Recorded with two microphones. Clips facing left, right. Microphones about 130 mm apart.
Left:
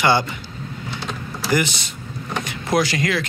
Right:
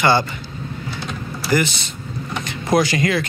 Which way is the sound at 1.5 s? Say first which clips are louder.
Right 2 dB; 15° left (ahead or behind).